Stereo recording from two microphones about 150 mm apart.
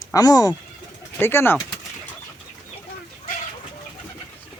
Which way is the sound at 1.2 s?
15° left (ahead or behind).